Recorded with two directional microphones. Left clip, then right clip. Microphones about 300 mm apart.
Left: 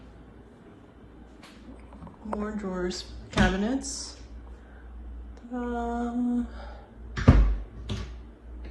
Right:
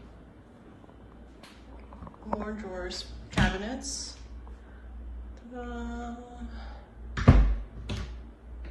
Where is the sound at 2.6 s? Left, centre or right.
Centre.